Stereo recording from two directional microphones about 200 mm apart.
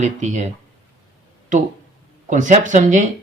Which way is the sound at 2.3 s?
40° right (ahead or behind).